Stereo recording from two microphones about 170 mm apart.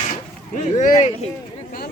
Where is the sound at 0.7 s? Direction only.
45° left (ahead or behind).